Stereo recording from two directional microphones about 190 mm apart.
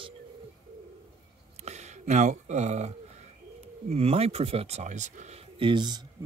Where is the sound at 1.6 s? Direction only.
35° right (ahead or behind).